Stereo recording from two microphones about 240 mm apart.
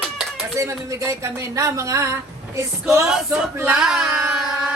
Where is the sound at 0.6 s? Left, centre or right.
Centre.